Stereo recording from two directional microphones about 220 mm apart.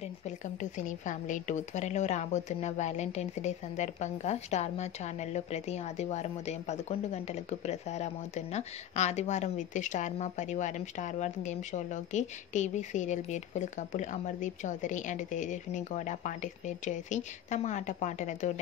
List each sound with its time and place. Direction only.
0.6 s a woman's voice: 35° left (ahead or behind)